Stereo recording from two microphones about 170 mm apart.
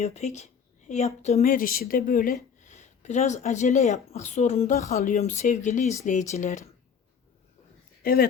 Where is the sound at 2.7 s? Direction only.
45° left (ahead or behind).